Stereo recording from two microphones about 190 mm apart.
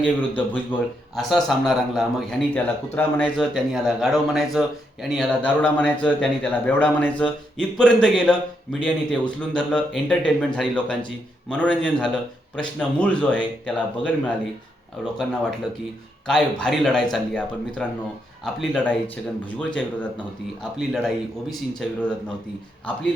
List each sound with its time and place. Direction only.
0.0 s a man's voice: 10° left (ahead or behind)